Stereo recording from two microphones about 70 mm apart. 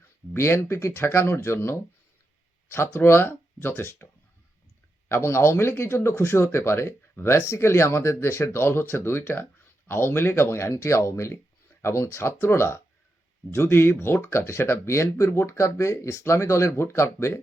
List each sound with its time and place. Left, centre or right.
0.3 s speech: left